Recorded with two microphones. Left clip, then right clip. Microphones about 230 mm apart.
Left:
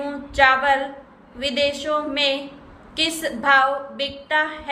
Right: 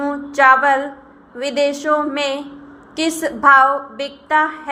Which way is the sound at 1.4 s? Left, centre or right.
Centre.